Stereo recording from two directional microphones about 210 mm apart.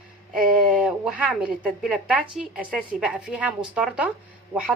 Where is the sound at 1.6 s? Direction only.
5° right (ahead or behind).